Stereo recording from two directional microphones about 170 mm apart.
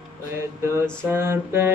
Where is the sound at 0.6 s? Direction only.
15° right (ahead or behind).